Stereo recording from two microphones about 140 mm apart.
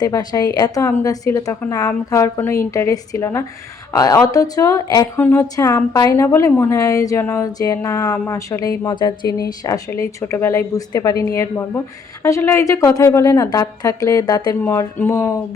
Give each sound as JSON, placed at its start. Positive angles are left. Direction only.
{"t": 0.0, "sound": "a woman's voice", "side_deg": 30}
{"t": 14.6, "sound": "a woman's voice", "side_deg": 15}